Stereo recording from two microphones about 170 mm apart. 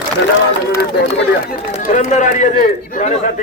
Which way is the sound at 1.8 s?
50° left (ahead or behind).